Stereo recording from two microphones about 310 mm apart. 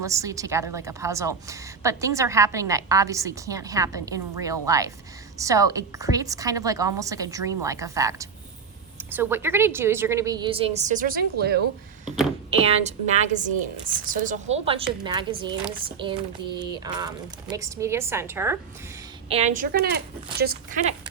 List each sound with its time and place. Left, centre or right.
0.0 s a woman's voice: centre; by 11.6 s right
12.5 s a woman's voice: centre
19.3 s a woman's voice: right